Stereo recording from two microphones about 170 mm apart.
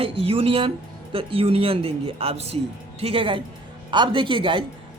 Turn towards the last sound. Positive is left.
turn(degrees=-30)  # may be behind; listen again after turning